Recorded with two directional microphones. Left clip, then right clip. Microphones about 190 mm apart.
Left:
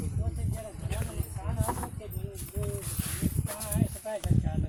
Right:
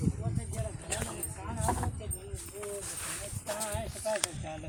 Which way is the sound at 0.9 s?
50° right (ahead or behind).